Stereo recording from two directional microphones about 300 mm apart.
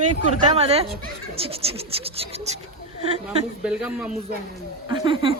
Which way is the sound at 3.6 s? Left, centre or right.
Centre.